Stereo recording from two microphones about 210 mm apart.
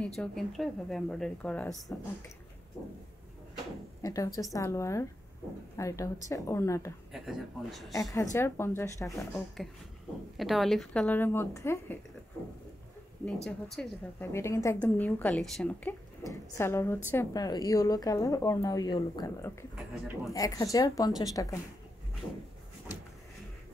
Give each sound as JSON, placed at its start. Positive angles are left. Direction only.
{"t": 0.0, "sound": "a woman's voice", "side_deg": 5}
{"t": 4.0, "sound": "a woman's voice", "side_deg": 15}
{"t": 7.1, "sound": "a woman's voice", "side_deg": 0}
{"t": 7.9, "sound": "a woman's voice", "side_deg": 15}
{"t": 10.3, "sound": "a woman's voice", "side_deg": 0}
{"t": 13.2, "sound": "a woman's voice", "side_deg": 5}
{"t": 19.7, "sound": "a woman's voice", "side_deg": -5}
{"t": 20.3, "sound": "a woman's voice", "side_deg": 15}